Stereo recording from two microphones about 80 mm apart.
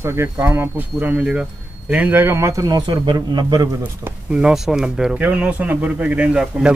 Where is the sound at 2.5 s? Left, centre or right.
Right.